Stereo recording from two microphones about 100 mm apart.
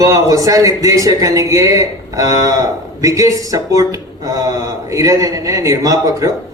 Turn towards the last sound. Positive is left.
turn(degrees=-35)  # may be behind; listen again after turning